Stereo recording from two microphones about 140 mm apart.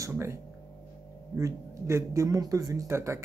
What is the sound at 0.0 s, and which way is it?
Speech, 20° right (ahead or behind).